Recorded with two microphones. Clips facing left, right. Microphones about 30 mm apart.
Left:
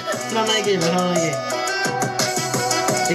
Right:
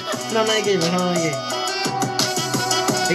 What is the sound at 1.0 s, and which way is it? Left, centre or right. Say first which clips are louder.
Music: left 1 dB; right.